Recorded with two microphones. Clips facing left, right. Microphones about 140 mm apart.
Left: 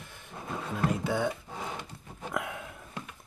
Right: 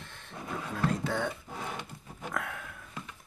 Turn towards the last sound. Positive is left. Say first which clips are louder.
# left 2 dB
turn(degrees=20)  # may be behind; listen again after turning